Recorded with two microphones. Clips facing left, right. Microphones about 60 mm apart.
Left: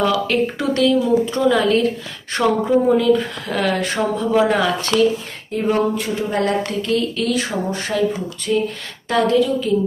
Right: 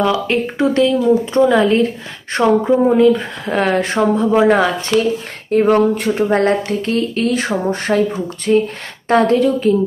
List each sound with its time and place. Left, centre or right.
0.0 s speech: centre; by 5.0 s right
5.5 s speech: right